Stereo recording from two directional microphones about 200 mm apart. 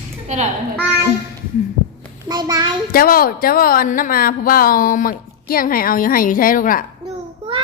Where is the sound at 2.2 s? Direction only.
20° right (ahead or behind).